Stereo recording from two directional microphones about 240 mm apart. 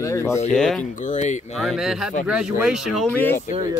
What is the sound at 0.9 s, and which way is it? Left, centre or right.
Speech, left.